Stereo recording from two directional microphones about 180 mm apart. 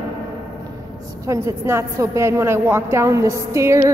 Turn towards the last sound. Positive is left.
turn(degrees=-15)  # may be behind; listen again after turning